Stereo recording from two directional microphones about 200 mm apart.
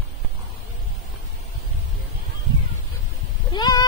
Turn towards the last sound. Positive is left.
turn(degrees=20)  # may be behind; listen again after turning